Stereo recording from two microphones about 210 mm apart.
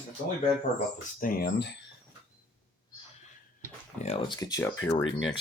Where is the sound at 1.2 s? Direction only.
45° left (ahead or behind).